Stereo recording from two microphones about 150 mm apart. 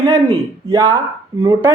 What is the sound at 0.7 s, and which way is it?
Speech, 20° right (ahead or behind).